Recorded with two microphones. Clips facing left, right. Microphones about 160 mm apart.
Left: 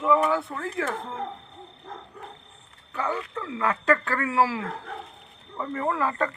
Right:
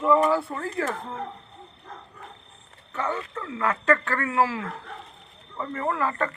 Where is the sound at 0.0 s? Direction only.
Centre (ahead or behind).